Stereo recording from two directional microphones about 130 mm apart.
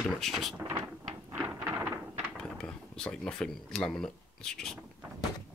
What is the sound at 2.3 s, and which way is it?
Speech, 5° left (ahead or behind).